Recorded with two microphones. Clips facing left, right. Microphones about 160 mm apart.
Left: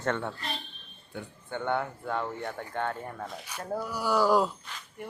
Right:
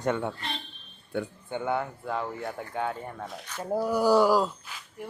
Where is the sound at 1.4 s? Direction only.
15° right (ahead or behind).